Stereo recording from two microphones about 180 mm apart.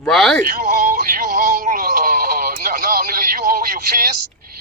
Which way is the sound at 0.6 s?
45° right (ahead or behind).